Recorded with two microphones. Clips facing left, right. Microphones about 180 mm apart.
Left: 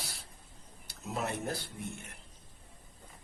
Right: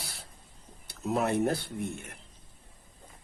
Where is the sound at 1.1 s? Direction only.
60° right (ahead or behind).